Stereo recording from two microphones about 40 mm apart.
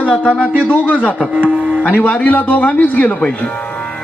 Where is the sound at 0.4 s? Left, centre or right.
Right.